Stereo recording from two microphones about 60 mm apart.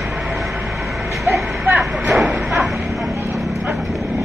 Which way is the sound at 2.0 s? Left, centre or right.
Centre.